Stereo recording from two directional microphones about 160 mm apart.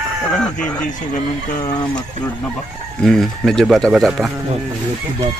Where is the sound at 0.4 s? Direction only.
5° left (ahead or behind).